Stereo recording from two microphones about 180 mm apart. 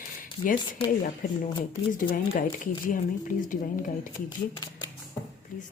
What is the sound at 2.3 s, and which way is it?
Speech, 50° left (ahead or behind).